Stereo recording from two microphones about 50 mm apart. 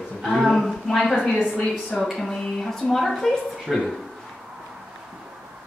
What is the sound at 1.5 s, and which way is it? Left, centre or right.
Speech, left.